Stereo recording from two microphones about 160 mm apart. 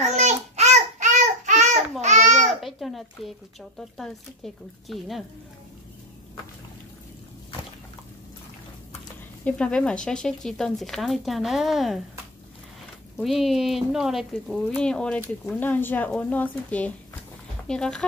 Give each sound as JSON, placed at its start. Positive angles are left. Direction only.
{"t": 0.0, "sound": "child singing", "side_deg": -45}
{"t": 2.6, "sound": "speech", "side_deg": 0}
{"t": 9.4, "sound": "speech", "side_deg": 5}
{"t": 13.2, "sound": "speech", "side_deg": 0}